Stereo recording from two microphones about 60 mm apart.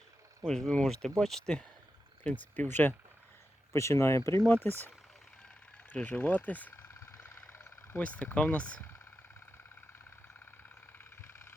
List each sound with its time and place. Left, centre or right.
0.4 s speech: centre
2.2 s speech: left
3.7 s speech: left
4.6 s speech: left
5.9 s speech: left
7.9 s speech: left